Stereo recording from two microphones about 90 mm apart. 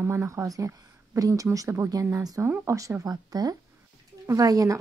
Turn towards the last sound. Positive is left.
turn(degrees=-40)  # may be behind; listen again after turning